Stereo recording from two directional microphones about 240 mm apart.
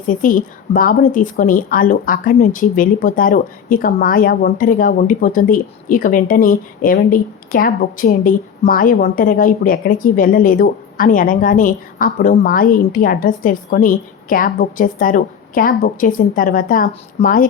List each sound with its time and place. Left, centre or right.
0.1 s a woman's voice: left